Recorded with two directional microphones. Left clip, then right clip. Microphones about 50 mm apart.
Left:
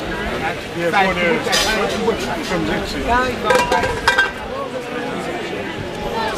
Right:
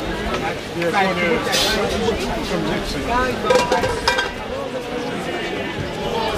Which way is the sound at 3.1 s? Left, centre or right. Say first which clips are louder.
Left 2 dB; left.